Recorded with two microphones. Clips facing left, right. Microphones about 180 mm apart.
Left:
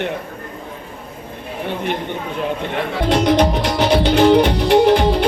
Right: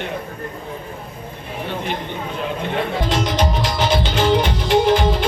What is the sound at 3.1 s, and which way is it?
Music, 60° left (ahead or behind).